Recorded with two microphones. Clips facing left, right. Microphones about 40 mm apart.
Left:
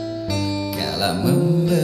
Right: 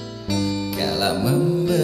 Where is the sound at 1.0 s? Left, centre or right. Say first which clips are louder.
Left 2 dB; centre.